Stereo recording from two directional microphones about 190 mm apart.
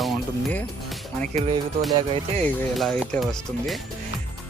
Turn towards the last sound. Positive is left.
turn(degrees=0)  # may be behind; listen again after turning